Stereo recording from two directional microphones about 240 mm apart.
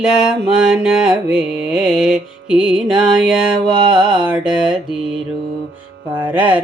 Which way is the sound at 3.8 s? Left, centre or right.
Centre.